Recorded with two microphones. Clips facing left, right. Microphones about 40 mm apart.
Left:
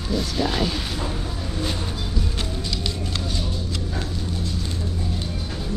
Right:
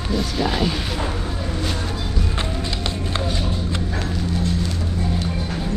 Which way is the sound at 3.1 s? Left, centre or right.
Right.